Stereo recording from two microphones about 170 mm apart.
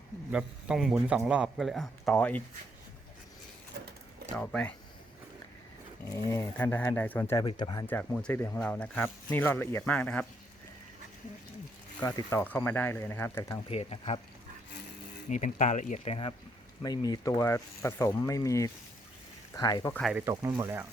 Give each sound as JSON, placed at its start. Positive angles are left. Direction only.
{"t": 0.3, "sound": "speech", "side_deg": -5}
{"t": 4.4, "sound": "speech", "side_deg": 10}
{"t": 6.1, "sound": "speech", "side_deg": 20}
{"t": 7.4, "sound": "speech", "side_deg": 25}
{"t": 7.9, "sound": "speech", "side_deg": 10}
{"t": 11.9, "sound": "speech", "side_deg": 20}
{"t": 13.7, "sound": "speech", "side_deg": 35}
{"t": 15.3, "sound": "speech", "side_deg": 50}
{"t": 16.8, "sound": "speech", "side_deg": 20}
{"t": 19.9, "sound": "speech", "side_deg": 5}
{"t": 20.3, "sound": "speech", "side_deg": -25}